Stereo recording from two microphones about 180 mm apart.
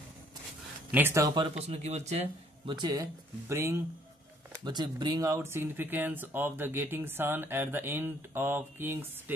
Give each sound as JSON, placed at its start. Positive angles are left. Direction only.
{"t": 0.9, "sound": "speech", "side_deg": -15}
{"t": 1.6, "sound": "speech", "side_deg": -35}
{"t": 2.6, "sound": "speech", "side_deg": -25}